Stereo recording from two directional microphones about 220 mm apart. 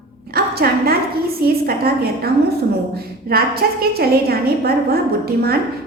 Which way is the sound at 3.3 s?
45° right (ahead or behind).